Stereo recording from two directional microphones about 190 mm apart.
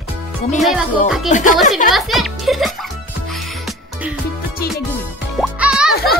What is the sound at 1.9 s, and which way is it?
Speech, centre (ahead or behind).